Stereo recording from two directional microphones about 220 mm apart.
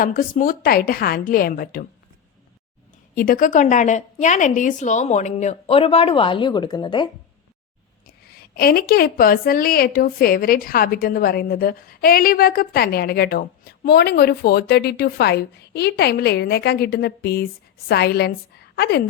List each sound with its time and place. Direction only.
0.0 s a woman's voice: 40° left (ahead or behind)
3.2 s a woman's voice: 40° left (ahead or behind); by 7.1 s 20° left (ahead or behind)
8.0 s a woman's voice: 45° left (ahead or behind)